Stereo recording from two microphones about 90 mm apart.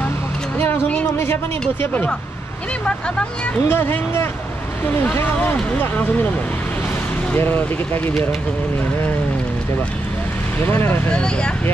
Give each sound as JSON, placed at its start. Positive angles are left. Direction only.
{"t": 0.6, "sound": "a sound", "side_deg": 20}
{"t": 1.1, "sound": "speech", "side_deg": 25}
{"t": 3.6, "sound": "speech", "side_deg": 25}
{"t": 7.3, "sound": "speech", "side_deg": 20}
{"t": 10.6, "sound": "speech", "side_deg": 25}
{"t": 11.1, "sound": "speech", "side_deg": 10}